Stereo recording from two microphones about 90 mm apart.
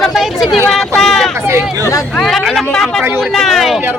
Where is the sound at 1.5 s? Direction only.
30° right (ahead or behind).